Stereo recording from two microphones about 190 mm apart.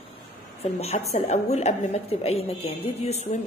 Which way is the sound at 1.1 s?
35° left (ahead or behind).